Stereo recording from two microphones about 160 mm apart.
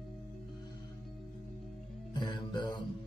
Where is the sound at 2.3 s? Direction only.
30° left (ahead or behind).